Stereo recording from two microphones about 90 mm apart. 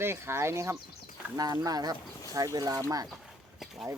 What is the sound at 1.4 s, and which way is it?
Speech, 45° right (ahead or behind).